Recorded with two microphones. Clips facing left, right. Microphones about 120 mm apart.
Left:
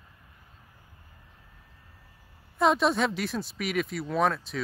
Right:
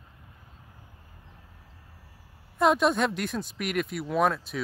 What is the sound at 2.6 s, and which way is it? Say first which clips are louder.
Speech: right 1 dB; centre (ahead or behind).